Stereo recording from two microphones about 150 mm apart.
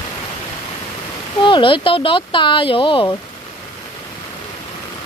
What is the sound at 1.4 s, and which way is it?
Speech, 30° left (ahead or behind).